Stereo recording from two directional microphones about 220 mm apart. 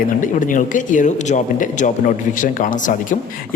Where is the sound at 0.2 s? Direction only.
35° left (ahead or behind).